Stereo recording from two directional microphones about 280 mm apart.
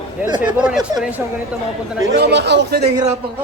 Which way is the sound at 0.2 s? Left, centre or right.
Centre.